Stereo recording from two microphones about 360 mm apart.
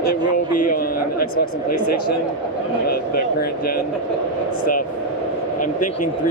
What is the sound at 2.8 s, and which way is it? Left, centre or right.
Speech, left.